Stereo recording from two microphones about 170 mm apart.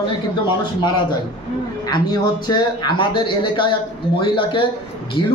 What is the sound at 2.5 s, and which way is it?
Speech, 25° left (ahead or behind).